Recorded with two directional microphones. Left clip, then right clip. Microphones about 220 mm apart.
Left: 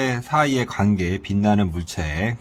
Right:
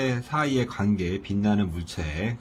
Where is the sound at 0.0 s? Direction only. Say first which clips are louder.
Left 6 dB; 35° left (ahead or behind).